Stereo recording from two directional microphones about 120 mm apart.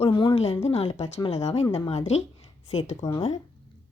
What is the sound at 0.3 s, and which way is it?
Speech, 60° left (ahead or behind).